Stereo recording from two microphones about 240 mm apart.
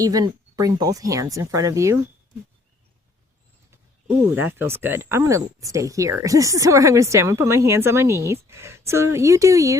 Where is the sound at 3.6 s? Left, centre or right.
Centre.